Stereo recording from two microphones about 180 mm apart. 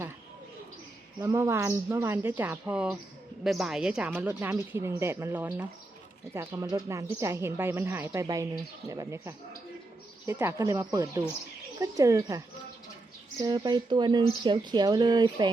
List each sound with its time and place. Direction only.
1.2 s speech: 15° right (ahead or behind)
13.4 s speech: 25° right (ahead or behind)